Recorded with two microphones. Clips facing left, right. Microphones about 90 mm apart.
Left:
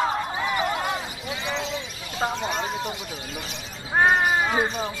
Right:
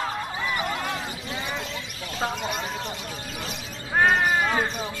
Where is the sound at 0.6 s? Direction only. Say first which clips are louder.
Left 3 dB; 20° left (ahead or behind).